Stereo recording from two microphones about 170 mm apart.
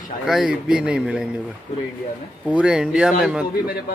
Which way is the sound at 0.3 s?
5° right (ahead or behind).